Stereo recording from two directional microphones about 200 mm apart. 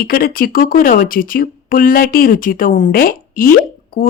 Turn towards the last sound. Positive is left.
turn(degrees=45)  # may be behind; listen again after turning